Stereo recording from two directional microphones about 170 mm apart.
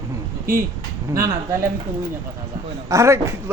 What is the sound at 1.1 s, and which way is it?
Speech, 15° right (ahead or behind).